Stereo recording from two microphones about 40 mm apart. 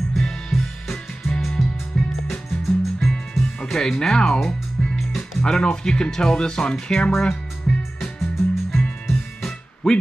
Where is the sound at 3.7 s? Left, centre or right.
Centre.